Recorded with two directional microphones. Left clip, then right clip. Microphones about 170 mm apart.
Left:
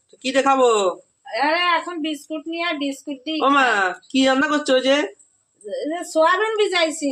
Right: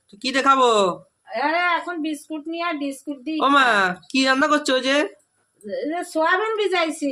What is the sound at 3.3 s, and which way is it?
Speech, 10° right (ahead or behind).